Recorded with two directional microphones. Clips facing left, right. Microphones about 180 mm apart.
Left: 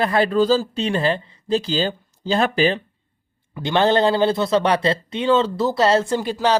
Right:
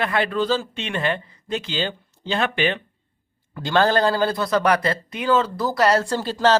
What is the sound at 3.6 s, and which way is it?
A man's voice, 20° left (ahead or behind).